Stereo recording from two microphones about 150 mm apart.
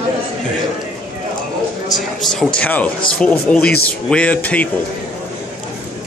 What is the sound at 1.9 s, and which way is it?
A man's voice, centre (ahead or behind).